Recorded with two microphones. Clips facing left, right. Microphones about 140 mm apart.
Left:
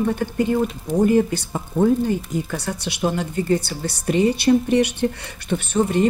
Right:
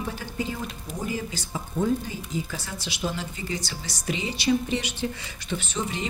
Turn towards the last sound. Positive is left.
turn(degrees=55)  # may be behind; listen again after turning